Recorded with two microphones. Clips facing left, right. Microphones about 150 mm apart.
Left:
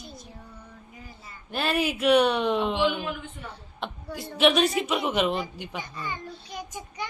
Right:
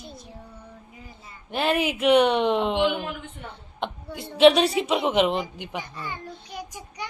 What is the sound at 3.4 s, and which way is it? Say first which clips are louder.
Child singing: right 4 dB; 25° right (ahead or behind).